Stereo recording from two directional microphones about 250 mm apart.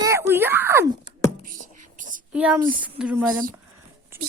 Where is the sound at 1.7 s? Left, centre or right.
Right.